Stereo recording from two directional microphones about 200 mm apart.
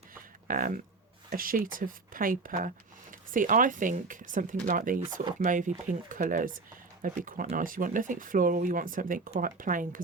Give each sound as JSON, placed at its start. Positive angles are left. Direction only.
{"t": 0.4, "sound": "speech", "side_deg": -45}